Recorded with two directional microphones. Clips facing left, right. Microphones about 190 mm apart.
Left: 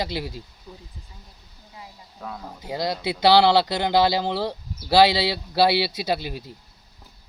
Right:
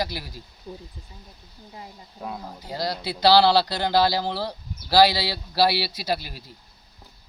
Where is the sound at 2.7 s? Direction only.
20° left (ahead or behind).